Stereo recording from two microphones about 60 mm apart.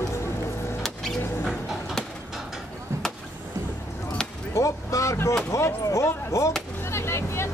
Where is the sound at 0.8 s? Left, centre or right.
Centre.